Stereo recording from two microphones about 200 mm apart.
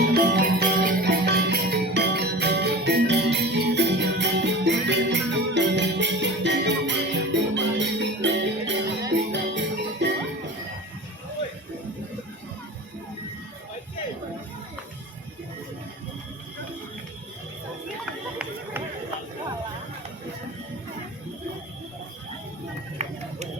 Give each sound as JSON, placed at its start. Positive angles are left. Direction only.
{"t": 0.1, "sound": "music", "side_deg": -55}
{"t": 18.0, "sound": "run", "side_deg": -5}
{"t": 23.0, "sound": "a sound", "side_deg": -30}